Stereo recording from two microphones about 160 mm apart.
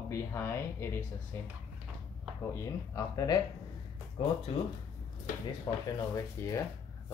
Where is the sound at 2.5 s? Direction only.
20° left (ahead or behind).